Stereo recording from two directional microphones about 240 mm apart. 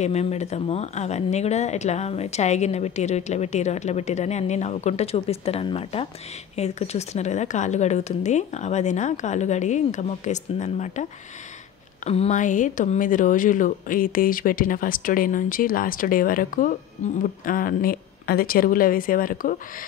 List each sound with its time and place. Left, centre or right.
0.0 s speech: left